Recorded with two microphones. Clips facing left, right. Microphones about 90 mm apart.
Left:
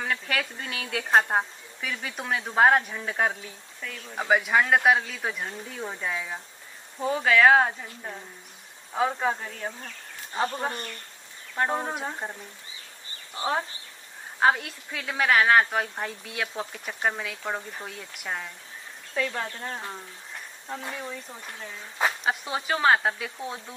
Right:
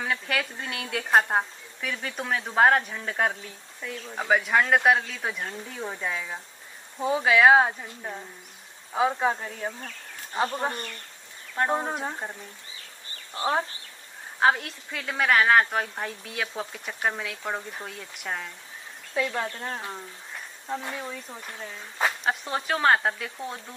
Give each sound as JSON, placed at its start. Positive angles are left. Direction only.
{"t": 0.0, "sound": "a woman's voice", "side_deg": 0}
{"t": 11.5, "sound": "a woman's voice", "side_deg": 0}
{"t": 13.4, "sound": "speech", "side_deg": 20}
{"t": 14.4, "sound": "a woman's voice", "side_deg": 0}
{"t": 19.1, "sound": "a woman's voice", "side_deg": -10}